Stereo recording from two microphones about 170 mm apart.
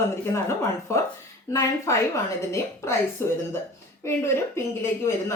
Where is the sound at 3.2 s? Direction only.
15° left (ahead or behind).